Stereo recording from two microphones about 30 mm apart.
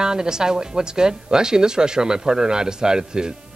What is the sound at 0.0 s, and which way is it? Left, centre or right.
Speech, right.